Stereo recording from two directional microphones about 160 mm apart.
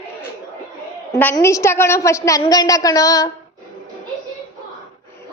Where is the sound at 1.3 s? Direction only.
20° left (ahead or behind).